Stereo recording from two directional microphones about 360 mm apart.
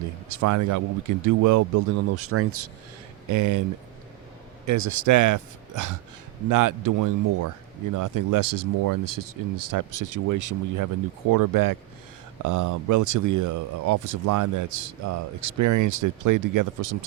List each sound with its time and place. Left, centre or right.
0.3 s speech: right
2.2 s speech: right
3.2 s speech: right
4.6 s speech: right